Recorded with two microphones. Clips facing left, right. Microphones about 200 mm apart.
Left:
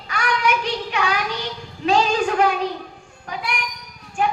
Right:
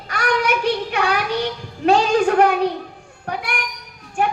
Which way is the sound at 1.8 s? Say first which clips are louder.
Right 4 dB; 55° right (ahead or behind).